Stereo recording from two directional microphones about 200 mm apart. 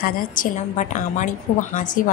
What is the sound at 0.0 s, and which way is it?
A woman's voice, 45° left (ahead or behind).